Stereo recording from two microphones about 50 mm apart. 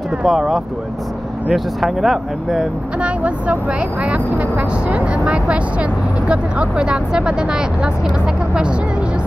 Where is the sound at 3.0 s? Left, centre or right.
Right.